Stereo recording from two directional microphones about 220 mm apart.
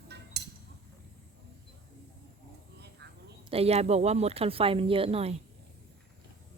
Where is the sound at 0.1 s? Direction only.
50° right (ahead or behind).